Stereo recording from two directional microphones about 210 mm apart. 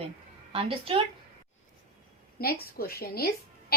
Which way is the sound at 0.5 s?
25° right (ahead or behind).